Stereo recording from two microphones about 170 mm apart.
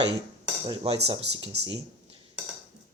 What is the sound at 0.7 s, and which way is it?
Speech, 30° right (ahead or behind).